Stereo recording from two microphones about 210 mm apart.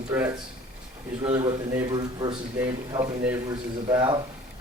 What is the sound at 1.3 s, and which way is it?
A man's voice, 20° right (ahead or behind).